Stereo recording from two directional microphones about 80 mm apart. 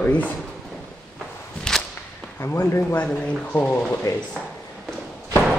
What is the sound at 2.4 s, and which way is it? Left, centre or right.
Speech, left.